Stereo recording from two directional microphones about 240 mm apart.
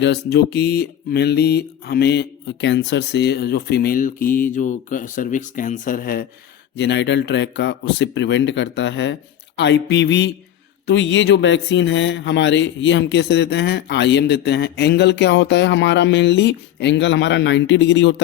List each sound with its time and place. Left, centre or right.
0.0 s speech: left